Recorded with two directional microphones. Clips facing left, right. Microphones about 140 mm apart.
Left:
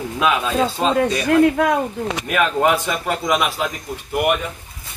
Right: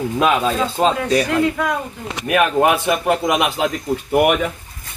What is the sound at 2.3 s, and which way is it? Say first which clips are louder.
Speech: right 3 dB; 20° right (ahead or behind).